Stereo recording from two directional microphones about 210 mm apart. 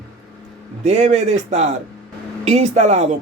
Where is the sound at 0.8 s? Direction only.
30° right (ahead or behind).